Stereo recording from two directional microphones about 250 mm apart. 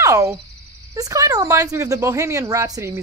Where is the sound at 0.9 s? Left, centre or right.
Centre.